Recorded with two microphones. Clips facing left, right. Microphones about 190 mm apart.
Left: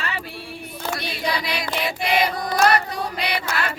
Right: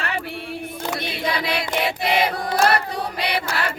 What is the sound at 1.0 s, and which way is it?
Music, 55° right (ahead or behind).